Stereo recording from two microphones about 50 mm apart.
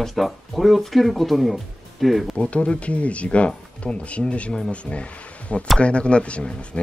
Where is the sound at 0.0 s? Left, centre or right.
Centre.